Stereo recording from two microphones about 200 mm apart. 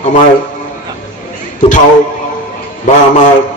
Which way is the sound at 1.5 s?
40° left (ahead or behind).